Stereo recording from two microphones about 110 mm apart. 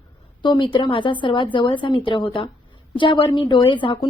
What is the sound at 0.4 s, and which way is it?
Speech, 45° left (ahead or behind).